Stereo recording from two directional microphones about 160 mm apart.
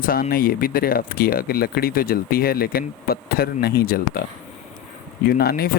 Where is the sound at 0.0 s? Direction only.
65° left (ahead or behind).